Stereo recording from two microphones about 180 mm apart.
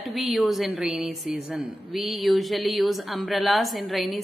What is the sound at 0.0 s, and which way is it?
A woman's voice, centre (ahead or behind).